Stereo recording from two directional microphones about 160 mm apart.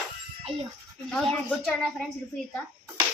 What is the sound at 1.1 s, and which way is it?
Speech, 5° left (ahead or behind).